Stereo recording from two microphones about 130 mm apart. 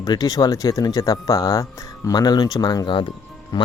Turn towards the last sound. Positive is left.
turn(degrees=35)  # may be behind; listen again after turning